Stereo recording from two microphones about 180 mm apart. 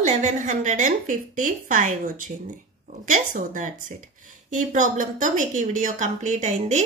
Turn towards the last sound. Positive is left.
turn(degrees=-40)  # may be behind; listen again after turning